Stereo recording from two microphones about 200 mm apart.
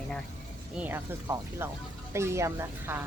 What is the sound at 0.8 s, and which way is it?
Speech, 10° right (ahead or behind).